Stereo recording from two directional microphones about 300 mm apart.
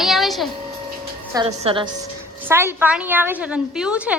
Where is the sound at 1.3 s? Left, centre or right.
Centre.